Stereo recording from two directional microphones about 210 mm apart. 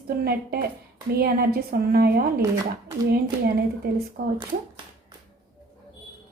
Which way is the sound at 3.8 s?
50° right (ahead or behind).